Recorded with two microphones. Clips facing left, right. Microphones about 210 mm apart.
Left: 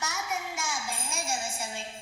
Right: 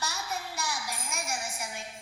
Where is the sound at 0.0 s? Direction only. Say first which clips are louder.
Left 2 dB; 20° left (ahead or behind).